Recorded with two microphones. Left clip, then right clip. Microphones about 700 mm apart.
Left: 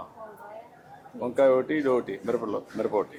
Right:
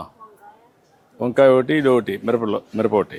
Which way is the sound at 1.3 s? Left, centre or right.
Right.